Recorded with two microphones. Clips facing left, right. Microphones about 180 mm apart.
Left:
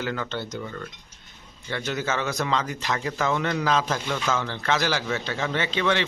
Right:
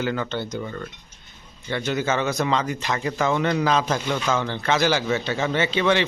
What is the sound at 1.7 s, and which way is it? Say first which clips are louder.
A man's voice: right 4 dB; centre (ahead or behind).